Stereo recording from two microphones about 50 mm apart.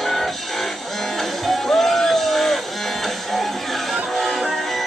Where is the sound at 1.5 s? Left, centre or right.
Centre.